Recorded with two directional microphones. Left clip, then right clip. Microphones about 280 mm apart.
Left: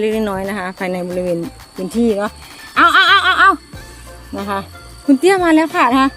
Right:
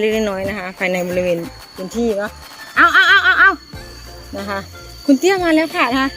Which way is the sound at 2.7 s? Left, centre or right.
Centre.